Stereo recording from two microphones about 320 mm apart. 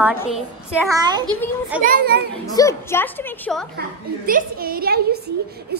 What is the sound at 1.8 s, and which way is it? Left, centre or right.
Speech, right.